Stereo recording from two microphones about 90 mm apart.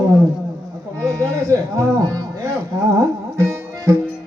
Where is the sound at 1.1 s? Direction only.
40° right (ahead or behind).